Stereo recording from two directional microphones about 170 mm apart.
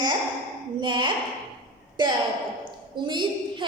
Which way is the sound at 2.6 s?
25° right (ahead or behind).